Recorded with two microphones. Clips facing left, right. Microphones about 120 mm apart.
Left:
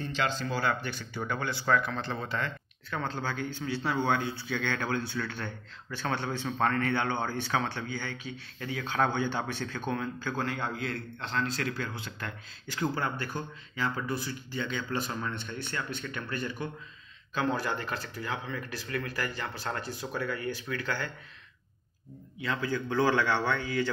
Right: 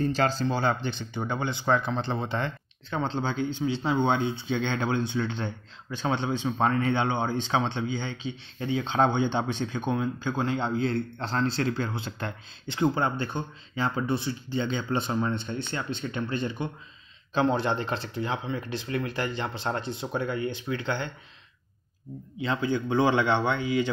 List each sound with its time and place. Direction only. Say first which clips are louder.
0.0 s speech: right 6 dB; 40° right (ahead or behind); by 21.1 s 25° right (ahead or behind)
22.4 s speech: right 4 dB; 25° right (ahead or behind)